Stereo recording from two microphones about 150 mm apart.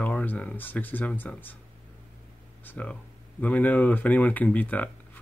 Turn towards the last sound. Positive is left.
turn(degrees=10)  # may be behind; listen again after turning